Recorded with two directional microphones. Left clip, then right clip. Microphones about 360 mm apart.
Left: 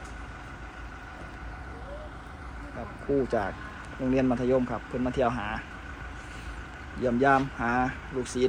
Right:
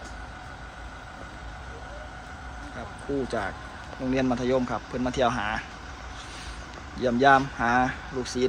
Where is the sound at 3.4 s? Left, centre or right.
Centre.